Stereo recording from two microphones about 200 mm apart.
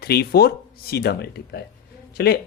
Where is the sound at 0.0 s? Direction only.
50° left (ahead or behind).